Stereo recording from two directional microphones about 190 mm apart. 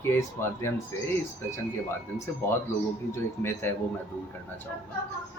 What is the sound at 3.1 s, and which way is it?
Speech, 15° left (ahead or behind).